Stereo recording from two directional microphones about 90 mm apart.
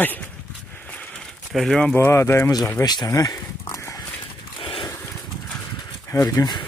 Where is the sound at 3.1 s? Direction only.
40° left (ahead or behind).